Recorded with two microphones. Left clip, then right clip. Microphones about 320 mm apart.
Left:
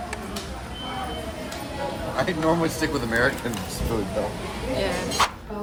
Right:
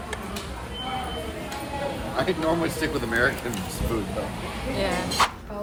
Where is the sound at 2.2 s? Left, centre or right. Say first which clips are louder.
Left 2 dB; left.